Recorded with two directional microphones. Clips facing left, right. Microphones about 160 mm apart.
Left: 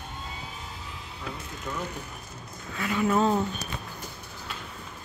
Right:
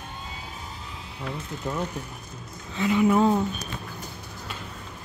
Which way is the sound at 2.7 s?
20° right (ahead or behind).